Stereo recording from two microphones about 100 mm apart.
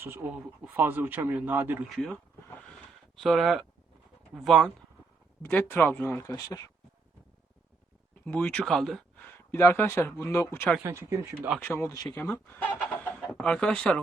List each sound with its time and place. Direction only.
0.0 s speech: 20° right (ahead or behind)
1.9 s a sound: 5° left (ahead or behind)
3.2 s speech: centre (ahead or behind)
5.4 s speech: 15° left (ahead or behind)
6.2 s speech: 35° left (ahead or behind)
8.4 s speech: 10° left (ahead or behind)
9.2 s speech: 25° left (ahead or behind)
10.8 s speech: 30° right (ahead or behind)
11.6 s speech: 25° left (ahead or behind); by 14.0 s 10° left (ahead or behind)